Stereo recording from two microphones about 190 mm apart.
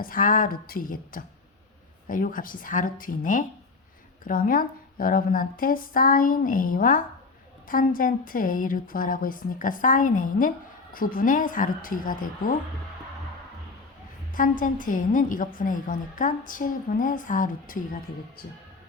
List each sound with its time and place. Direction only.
0.0 s a woman's voice: 50° left (ahead or behind)
14.3 s a woman's voice: 45° left (ahead or behind)